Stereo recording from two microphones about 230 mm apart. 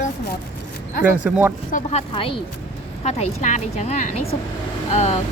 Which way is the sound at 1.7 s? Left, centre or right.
Left.